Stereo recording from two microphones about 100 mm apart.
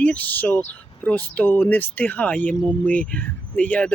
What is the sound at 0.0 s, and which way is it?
Speech, 15° left (ahead or behind).